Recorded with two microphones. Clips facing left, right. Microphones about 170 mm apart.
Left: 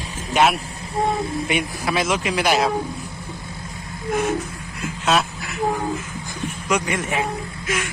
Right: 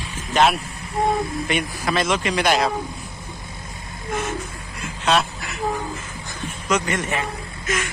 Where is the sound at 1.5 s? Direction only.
10° left (ahead or behind).